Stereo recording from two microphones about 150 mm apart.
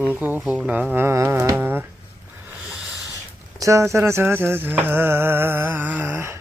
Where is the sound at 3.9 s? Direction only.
15° right (ahead or behind).